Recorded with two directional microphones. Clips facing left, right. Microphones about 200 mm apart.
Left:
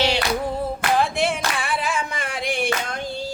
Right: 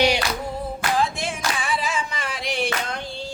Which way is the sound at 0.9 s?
65° left (ahead or behind).